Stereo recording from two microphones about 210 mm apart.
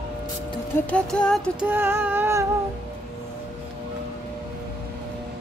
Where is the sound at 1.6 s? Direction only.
10° right (ahead or behind).